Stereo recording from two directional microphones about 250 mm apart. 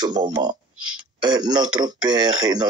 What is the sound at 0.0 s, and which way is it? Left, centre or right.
Speech, centre.